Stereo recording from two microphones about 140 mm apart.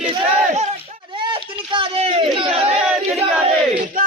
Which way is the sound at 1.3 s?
40° right (ahead or behind).